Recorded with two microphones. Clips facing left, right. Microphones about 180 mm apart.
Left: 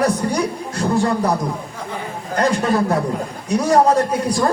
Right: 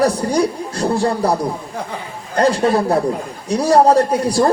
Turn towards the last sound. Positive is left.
turn(degrees=-35)  # may be behind; listen again after turning